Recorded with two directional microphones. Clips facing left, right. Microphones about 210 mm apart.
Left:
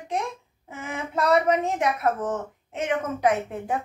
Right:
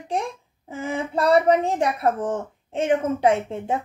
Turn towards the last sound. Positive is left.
turn(degrees=-25)  # may be behind; listen again after turning